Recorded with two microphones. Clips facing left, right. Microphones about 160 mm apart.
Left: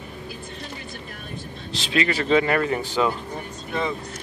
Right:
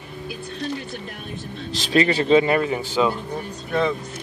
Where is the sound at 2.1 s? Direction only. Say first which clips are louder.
Right 2 dB; 25° right (ahead or behind).